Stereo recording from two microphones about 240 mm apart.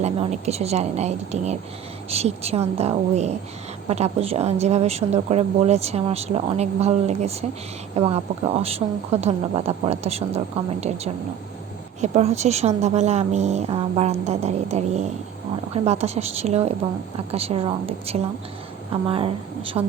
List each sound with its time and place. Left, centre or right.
0.0 s a woman's voice: right